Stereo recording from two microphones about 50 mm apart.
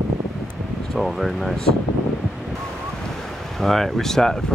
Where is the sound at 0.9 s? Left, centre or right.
Centre.